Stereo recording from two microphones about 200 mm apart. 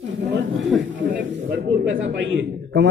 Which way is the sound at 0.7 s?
Centre (ahead or behind).